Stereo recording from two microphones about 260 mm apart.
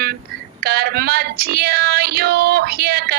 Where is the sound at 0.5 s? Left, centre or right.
Right.